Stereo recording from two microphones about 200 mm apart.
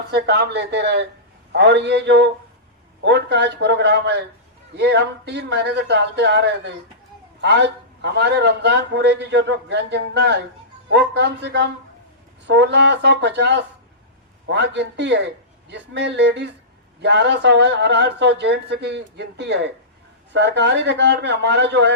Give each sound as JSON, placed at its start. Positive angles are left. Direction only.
{"t": 0.1, "sound": "a man's voice", "side_deg": -60}